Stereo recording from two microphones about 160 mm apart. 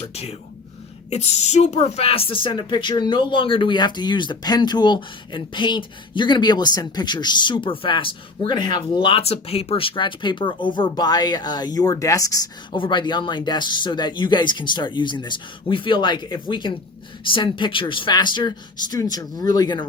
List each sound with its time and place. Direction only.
0.0 s a woman's voice: 40° left (ahead or behind)